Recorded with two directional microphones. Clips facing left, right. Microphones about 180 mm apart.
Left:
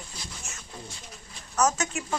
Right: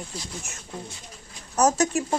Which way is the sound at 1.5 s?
35° right (ahead or behind).